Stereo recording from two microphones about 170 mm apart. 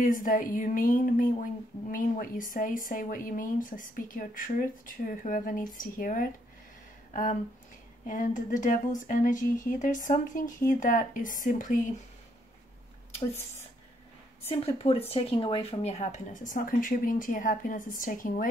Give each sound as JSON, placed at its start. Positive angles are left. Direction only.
{"t": 0.0, "sound": "speech", "side_deg": 50}
{"t": 14.5, "sound": "speech", "side_deg": 35}